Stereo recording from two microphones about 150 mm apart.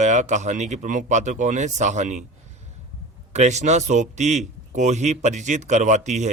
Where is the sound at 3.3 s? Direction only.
50° right (ahead or behind).